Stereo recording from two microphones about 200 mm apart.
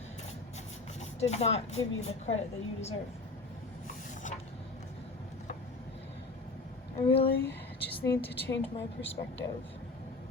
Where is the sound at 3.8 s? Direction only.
40° left (ahead or behind).